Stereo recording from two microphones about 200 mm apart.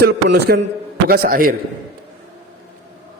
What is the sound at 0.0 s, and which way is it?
A man's voice, 55° right (ahead or behind).